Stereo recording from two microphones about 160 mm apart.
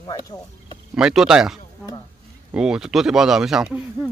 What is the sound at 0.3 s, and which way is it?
Speech, 20° left (ahead or behind).